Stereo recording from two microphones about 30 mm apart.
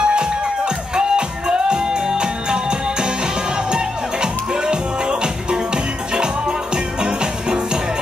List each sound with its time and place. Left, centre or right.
0.0 s music: right